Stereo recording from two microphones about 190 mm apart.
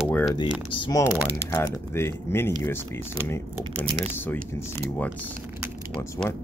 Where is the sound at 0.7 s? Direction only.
20° left (ahead or behind).